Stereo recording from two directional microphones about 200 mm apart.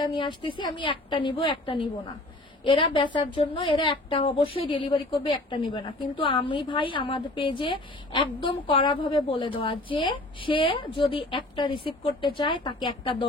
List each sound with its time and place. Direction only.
0.0 s a woman's voice: 25° left (ahead or behind)